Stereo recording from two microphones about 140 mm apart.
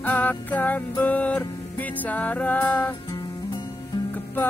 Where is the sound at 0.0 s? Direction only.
10° left (ahead or behind).